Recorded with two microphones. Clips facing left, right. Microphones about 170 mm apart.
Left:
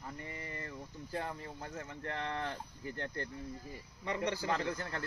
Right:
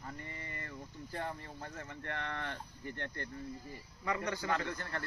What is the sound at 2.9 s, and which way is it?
A man's voice, 35° left (ahead or behind).